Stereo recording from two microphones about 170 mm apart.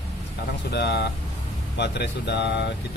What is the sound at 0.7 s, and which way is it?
Speech, 75° left (ahead or behind).